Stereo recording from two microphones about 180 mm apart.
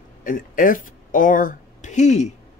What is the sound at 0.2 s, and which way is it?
Speech, 50° left (ahead or behind).